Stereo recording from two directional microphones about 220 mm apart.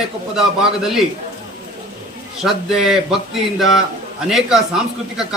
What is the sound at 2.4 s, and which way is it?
Speech, centre (ahead or behind).